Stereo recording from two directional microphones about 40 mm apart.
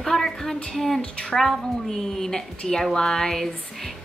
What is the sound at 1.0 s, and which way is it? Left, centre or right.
Speech, left.